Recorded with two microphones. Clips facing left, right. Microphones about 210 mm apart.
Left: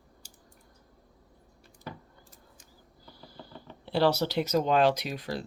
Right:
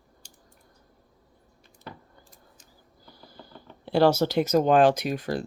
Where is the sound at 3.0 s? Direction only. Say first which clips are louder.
Even; 45° right (ahead or behind).